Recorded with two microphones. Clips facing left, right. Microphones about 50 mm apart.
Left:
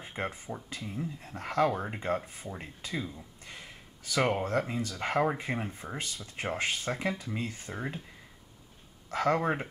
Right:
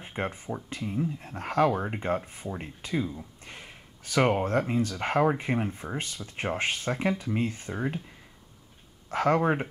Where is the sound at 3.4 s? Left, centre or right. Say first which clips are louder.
Right 2 dB; right.